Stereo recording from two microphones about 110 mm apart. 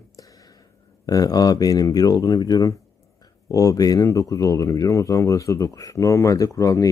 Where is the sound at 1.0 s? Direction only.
35° left (ahead or behind).